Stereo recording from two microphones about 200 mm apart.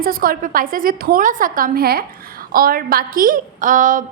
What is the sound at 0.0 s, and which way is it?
A woman's voice, 45° right (ahead or behind).